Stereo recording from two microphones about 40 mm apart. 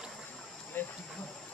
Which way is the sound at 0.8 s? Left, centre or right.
Left.